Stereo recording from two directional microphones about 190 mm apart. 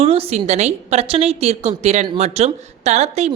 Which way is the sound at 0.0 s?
30° right (ahead or behind).